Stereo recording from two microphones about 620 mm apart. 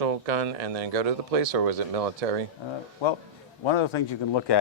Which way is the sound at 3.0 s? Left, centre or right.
Left.